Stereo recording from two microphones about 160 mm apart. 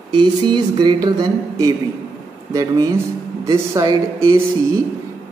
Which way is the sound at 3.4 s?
20° right (ahead or behind).